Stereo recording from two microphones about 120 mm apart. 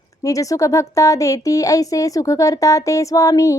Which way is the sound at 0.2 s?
30° left (ahead or behind).